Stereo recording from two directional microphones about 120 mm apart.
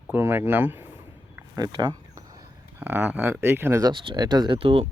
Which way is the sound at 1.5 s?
35° right (ahead or behind).